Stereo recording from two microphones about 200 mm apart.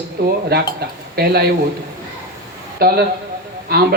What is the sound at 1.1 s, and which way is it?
Speech, 50° right (ahead or behind).